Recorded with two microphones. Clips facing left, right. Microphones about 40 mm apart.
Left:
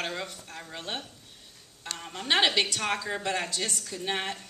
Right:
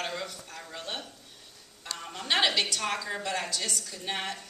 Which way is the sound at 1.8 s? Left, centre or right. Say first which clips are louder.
Left 1 dB; centre.